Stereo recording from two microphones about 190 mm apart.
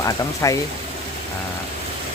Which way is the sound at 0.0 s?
15° left (ahead or behind).